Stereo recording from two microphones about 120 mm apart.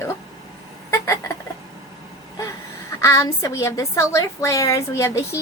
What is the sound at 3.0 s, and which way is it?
A woman's voice, 25° left (ahead or behind).